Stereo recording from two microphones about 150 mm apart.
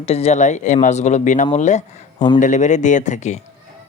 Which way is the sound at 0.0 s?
45° left (ahead or behind).